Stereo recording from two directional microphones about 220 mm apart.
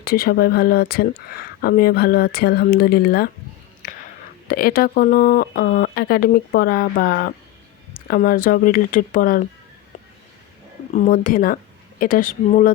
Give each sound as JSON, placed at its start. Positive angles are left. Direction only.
{"t": 0.0, "sound": "speech", "side_deg": 45}
{"t": 4.4, "sound": "speech", "side_deg": 40}
{"t": 10.9, "sound": "speech", "side_deg": 35}